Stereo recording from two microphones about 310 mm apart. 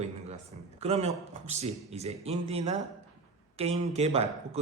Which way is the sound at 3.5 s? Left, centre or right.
Centre.